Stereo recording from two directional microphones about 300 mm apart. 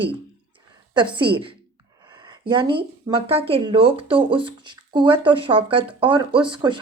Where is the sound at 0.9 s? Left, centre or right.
Centre.